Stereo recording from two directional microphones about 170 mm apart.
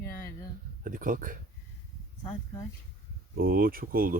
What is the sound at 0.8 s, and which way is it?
Speech, 55° right (ahead or behind).